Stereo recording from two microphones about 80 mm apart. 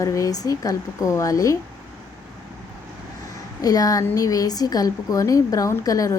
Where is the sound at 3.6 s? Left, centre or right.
Left.